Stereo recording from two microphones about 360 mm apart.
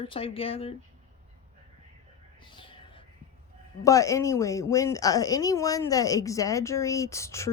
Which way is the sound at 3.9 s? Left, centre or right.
Centre.